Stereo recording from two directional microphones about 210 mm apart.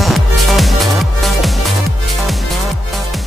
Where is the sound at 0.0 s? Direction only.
Centre (ahead or behind).